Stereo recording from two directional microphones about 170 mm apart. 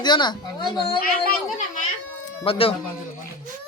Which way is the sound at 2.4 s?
35° left (ahead or behind).